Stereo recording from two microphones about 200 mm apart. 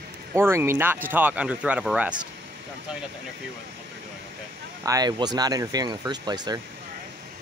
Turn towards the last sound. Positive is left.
turn(degrees=-20)  # may be behind; listen again after turning